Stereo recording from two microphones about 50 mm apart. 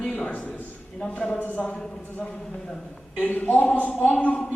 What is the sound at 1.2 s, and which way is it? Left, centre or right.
Speech, left.